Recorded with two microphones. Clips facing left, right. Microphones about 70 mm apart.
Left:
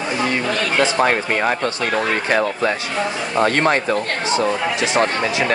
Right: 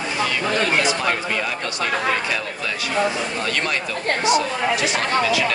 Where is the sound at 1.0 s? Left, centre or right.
Left.